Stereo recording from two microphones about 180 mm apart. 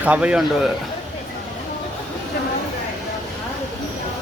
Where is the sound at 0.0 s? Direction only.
5° right (ahead or behind).